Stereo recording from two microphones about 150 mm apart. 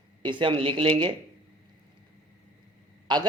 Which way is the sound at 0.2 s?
30° right (ahead or behind).